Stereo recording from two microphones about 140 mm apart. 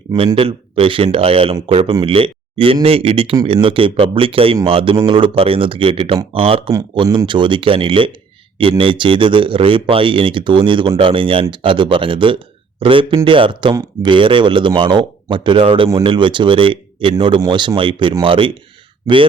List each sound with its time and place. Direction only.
0.3 s speech: 40° right (ahead or behind)
6.7 s speech: 25° right (ahead or behind)
7.3 s speech: 35° right (ahead or behind)